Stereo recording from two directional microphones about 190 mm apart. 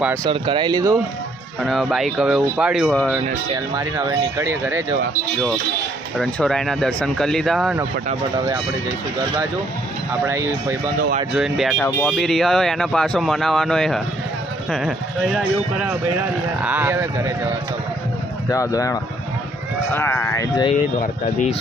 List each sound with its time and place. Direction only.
0.3 s speech: 25° right (ahead or behind)
1.6 s speech: centre (ahead or behind)
3.8 s speech: 15° right (ahead or behind)
6.1 s speech: centre (ahead or behind)
10.2 s speech: 15° right (ahead or behind)
11.3 s speech: centre (ahead or behind)
18.4 s speech: 15° left (ahead or behind)
21.0 s speech: 40° left (ahead or behind)